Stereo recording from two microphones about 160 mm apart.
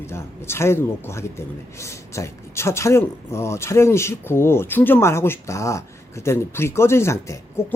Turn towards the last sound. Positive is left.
turn(degrees=15)  # may be behind; listen again after turning